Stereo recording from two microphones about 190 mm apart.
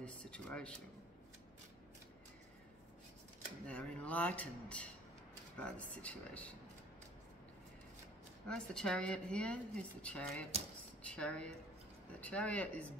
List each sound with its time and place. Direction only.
0.0 s speech: 5° left (ahead or behind)
3.6 s speech: 5° left (ahead or behind)
8.5 s speech: 5° left (ahead or behind)